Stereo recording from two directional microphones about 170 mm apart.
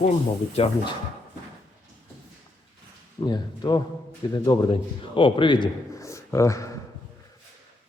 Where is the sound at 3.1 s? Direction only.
25° left (ahead or behind).